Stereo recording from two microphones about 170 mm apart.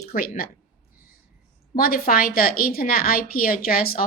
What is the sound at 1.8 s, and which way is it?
A woman's voice, 60° left (ahead or behind).